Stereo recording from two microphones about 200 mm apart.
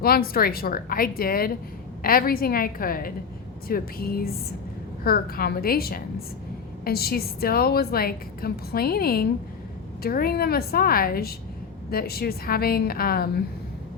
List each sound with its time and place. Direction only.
0.0 s a woman's voice: 50° left (ahead or behind)